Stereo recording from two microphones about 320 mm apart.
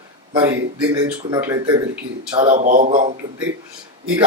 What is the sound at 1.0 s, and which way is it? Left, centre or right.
Speech, centre.